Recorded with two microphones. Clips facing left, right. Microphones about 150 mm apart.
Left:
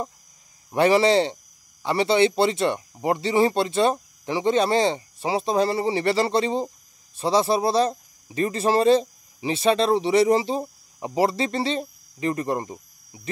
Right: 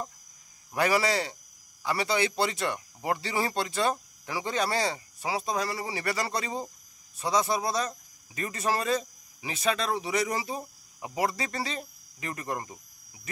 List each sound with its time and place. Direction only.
0.7 s speech: 25° left (ahead or behind)